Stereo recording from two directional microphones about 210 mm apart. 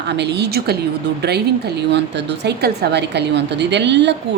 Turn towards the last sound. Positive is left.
turn(degrees=-55)  # may be behind; listen again after turning